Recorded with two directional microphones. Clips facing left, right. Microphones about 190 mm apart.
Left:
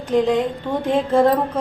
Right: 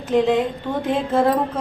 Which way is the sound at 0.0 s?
Centre (ahead or behind).